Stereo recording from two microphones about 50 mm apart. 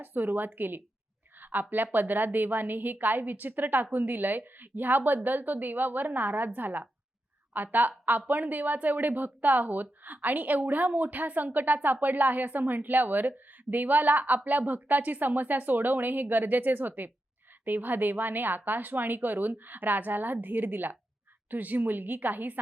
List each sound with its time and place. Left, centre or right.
0.0 s speech: right
1.4 s a sound: right
1.7 s a woman's voice: right